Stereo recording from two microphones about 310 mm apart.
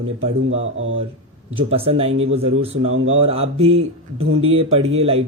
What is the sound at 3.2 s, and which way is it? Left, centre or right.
Speech, centre.